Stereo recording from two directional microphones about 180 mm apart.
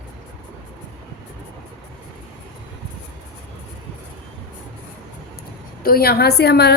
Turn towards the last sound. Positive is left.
turn(degrees=65)  # may be behind; listen again after turning